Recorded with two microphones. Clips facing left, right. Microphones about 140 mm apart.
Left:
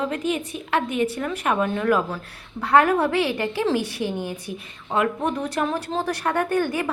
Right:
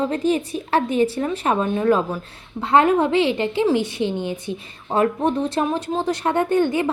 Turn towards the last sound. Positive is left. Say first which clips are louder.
# right 4 dB
turn(degrees=-25)  # may be behind; listen again after turning